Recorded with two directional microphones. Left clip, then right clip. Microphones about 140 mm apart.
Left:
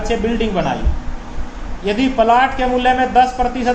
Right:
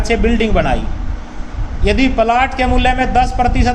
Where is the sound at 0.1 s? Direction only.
55° right (ahead or behind).